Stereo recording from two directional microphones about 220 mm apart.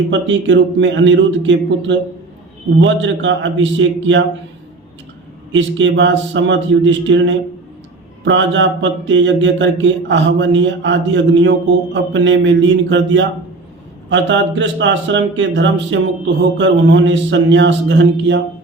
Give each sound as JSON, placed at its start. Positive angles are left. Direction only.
{"t": 0.1, "sound": "speech", "side_deg": -55}
{"t": 5.5, "sound": "speech", "side_deg": -55}